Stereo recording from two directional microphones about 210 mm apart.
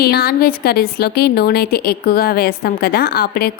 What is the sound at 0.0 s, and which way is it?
A woman's voice, 45° left (ahead or behind).